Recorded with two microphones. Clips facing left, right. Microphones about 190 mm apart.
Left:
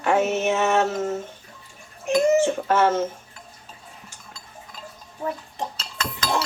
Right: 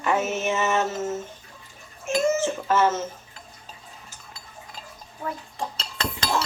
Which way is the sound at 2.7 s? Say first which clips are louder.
Even; 60° left (ahead or behind).